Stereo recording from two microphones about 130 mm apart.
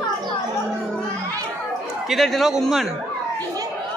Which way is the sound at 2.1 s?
Centre (ahead or behind).